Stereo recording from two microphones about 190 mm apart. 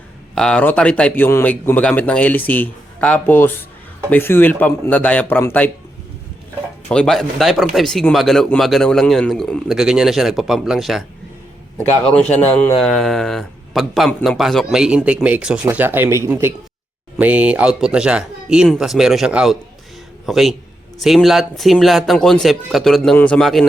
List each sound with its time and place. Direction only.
0.3 s a man's voice: 5° left (ahead or behind)
6.8 s speech: 5° left (ahead or behind)
12.1 s a man's voice: 5° left (ahead or behind)